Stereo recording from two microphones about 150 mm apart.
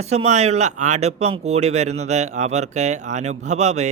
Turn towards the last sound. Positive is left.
turn(degrees=-50)  # may be behind; listen again after turning